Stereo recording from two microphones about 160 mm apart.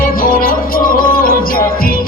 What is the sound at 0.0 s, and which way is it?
Music, 60° left (ahead or behind).